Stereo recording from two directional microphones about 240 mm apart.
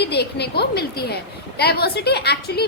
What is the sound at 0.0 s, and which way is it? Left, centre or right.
A woman's voice, left.